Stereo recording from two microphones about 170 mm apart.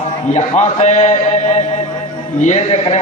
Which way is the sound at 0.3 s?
40° left (ahead or behind).